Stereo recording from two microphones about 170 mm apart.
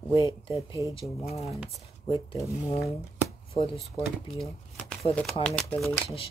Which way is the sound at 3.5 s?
35° left (ahead or behind).